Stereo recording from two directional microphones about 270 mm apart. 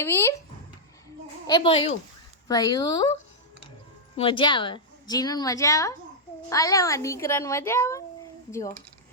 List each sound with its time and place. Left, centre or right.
0.0 s a woman's voice: centre
1.5 s a woman's voice: centre
4.2 s a woman's voice: centre